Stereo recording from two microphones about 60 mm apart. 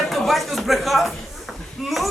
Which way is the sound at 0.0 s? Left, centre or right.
Centre.